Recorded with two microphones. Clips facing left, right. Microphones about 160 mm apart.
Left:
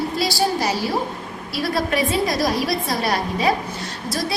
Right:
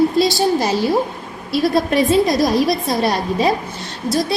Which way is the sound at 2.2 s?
20° right (ahead or behind).